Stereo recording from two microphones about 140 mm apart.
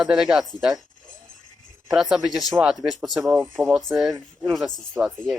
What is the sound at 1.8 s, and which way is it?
Speech, centre (ahead or behind).